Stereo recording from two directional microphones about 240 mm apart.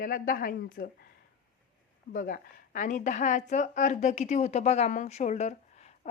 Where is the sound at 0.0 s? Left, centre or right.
Left.